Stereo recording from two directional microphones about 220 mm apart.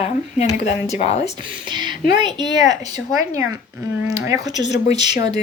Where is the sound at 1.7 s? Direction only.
20° right (ahead or behind).